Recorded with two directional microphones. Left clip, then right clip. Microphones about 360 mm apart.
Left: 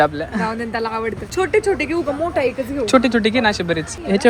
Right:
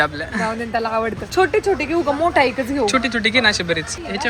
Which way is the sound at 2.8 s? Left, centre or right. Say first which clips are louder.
Left 4 dB; centre.